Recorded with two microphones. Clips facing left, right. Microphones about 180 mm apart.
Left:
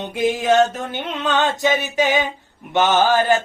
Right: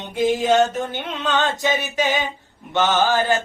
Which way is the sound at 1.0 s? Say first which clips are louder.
Left 4 dB; 15° left (ahead or behind).